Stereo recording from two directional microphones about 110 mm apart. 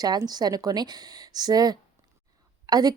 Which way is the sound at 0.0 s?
35° right (ahead or behind).